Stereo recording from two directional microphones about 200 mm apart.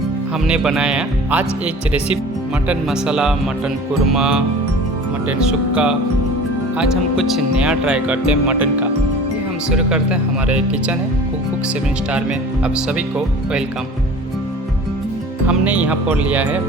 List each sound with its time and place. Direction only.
0.4 s speech: 5° right (ahead or behind)
5.5 s speech: 5° right (ahead or behind)
12.1 s speech: 5° right (ahead or behind)
15.4 s speech: 5° right (ahead or behind)